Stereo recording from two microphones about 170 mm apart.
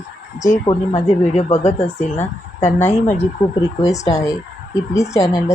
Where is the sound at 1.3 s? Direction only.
40° left (ahead or behind).